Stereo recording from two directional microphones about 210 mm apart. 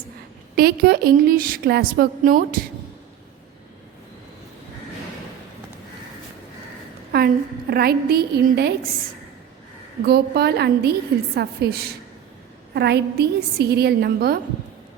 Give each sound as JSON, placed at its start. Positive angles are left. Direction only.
{"t": 0.5, "sound": "a woman's voice", "side_deg": -45}
{"t": 7.1, "sound": "a sound", "side_deg": -45}
{"t": 7.7, "sound": "a woman's voice", "side_deg": -50}
{"t": 10.1, "sound": "a woman's voice", "side_deg": -50}